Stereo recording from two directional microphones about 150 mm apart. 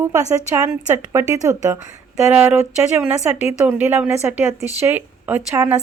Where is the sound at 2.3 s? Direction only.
5° right (ahead or behind).